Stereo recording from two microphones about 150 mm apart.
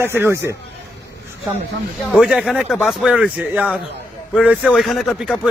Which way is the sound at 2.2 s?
5° right (ahead or behind).